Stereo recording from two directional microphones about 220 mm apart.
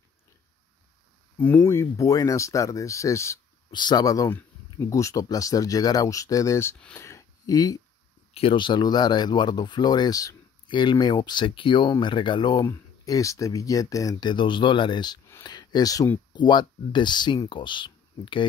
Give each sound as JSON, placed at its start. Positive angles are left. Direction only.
{"t": 1.4, "sound": "speech", "side_deg": 10}